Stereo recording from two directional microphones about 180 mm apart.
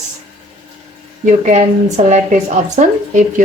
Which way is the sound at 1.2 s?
40° right (ahead or behind).